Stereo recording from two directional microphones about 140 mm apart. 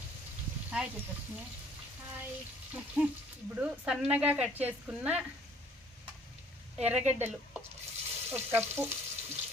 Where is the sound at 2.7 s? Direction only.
5° right (ahead or behind).